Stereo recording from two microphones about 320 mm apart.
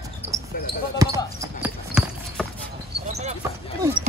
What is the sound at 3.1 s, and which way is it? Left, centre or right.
Dog, right.